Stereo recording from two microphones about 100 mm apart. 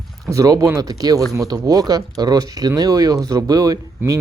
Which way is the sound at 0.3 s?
35° right (ahead or behind).